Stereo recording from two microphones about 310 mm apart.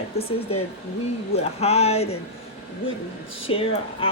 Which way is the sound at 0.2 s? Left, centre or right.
Centre.